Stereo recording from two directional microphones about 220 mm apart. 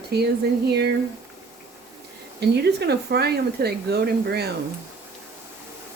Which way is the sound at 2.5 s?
50° right (ahead or behind).